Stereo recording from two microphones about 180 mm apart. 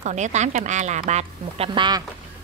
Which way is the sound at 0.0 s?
40° right (ahead or behind).